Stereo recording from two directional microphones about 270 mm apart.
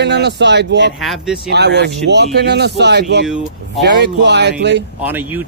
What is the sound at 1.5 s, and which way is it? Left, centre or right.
Speech, right.